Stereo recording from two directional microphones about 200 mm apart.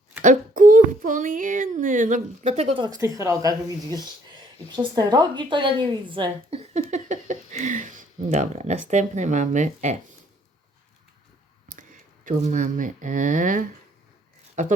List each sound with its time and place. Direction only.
0.2 s a woman's voice: 40° right (ahead or behind)
6.9 s speech: 35° right (ahead or behind)
11.7 s speech: 40° right (ahead or behind)